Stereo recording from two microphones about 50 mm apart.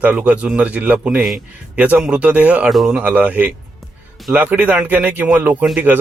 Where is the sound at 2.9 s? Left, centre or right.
Right.